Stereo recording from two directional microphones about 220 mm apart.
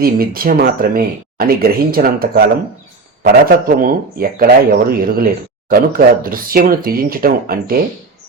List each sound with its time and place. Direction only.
0.0 s speech: 40° right (ahead or behind)